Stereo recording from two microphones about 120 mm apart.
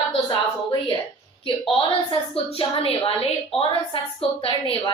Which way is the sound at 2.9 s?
50° left (ahead or behind).